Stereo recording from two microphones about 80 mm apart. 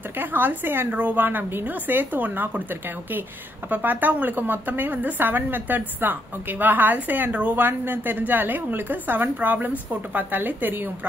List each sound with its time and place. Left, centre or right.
0.2 s a woman's voice: right
3.7 s a woman's voice: right